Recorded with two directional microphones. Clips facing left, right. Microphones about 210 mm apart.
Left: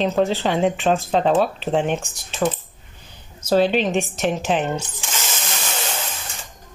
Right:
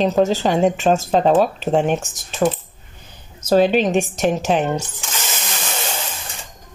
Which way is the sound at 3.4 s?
45° right (ahead or behind).